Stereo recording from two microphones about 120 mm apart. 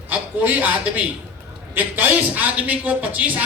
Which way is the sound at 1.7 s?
15° right (ahead or behind).